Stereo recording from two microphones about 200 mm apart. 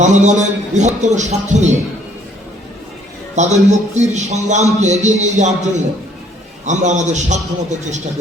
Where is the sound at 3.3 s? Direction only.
35° right (ahead or behind).